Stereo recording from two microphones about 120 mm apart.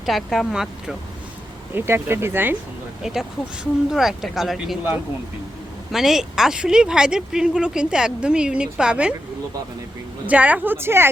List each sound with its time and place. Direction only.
0.0 s speech: centre (ahead or behind)
1.7 s speech: 20° right (ahead or behind)
3.0 s speech: 5° right (ahead or behind)
5.9 s speech: centre (ahead or behind)
10.2 s speech: 10° right (ahead or behind)